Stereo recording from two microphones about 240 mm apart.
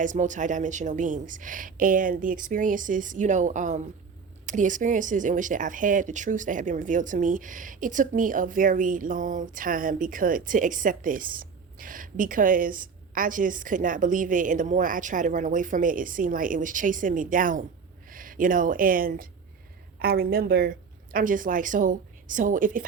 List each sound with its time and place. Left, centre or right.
0.0 s speech: right